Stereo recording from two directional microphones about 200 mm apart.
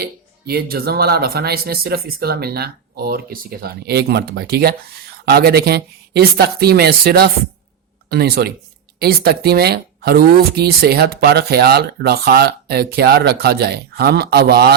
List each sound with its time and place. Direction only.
0.0 s speech: 50° right (ahead or behind)